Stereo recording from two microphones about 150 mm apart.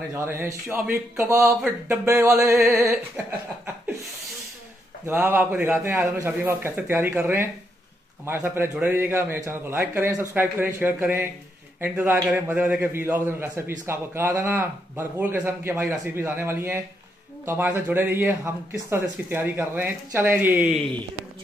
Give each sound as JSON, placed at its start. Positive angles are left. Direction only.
{"t": 0.2, "sound": "a man's voice", "side_deg": -15}
{"t": 5.0, "sound": "a man's voice", "side_deg": -15}